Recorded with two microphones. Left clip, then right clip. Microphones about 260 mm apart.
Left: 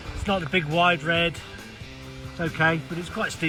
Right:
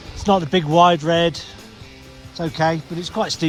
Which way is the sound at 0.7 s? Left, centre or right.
Right.